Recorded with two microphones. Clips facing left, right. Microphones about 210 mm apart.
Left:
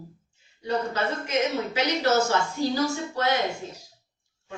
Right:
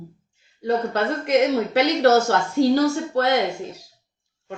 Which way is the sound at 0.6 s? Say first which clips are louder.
Right 5 dB; 65° right (ahead or behind).